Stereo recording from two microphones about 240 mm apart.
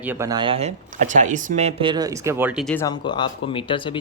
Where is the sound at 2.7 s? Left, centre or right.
Centre.